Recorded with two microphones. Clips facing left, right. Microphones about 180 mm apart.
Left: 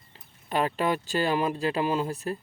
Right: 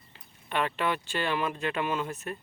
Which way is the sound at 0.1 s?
35° left (ahead or behind).